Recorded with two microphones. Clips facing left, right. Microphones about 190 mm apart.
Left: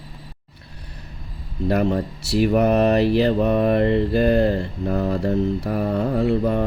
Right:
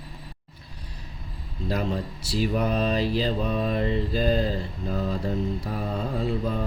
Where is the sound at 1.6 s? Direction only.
65° left (ahead or behind).